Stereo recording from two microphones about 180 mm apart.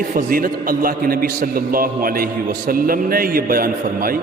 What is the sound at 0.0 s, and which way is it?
A man's voice, 50° right (ahead or behind).